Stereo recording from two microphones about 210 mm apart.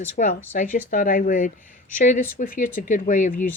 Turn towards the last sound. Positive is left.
turn(degrees=40)  # may be behind; listen again after turning